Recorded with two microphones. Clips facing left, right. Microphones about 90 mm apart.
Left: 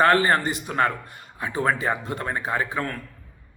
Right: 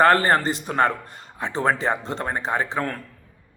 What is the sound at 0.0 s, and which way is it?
A man's voice, 35° right (ahead or behind).